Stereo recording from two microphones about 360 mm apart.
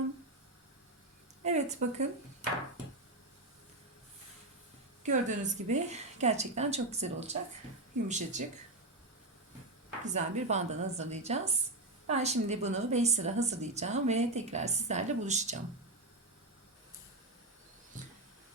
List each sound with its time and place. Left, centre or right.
1.5 s a sound: centre
5.0 s a woman's voice: centre
10.2 s a woman's voice: centre